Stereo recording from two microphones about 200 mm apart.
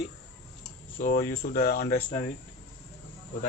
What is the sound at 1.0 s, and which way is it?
Speech, 45° left (ahead or behind).